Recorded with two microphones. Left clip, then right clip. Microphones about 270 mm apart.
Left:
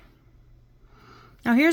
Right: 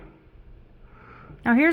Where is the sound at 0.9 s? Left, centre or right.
Centre.